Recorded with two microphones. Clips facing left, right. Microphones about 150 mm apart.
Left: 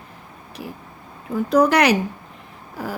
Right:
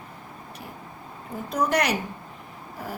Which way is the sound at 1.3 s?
80° left.